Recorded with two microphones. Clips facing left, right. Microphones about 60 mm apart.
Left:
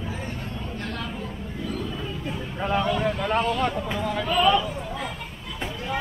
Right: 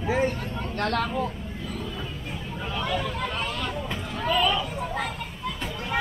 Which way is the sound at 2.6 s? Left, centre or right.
Left.